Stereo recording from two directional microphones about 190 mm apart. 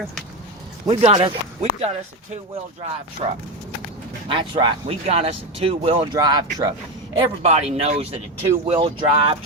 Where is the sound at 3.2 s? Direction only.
25° right (ahead or behind).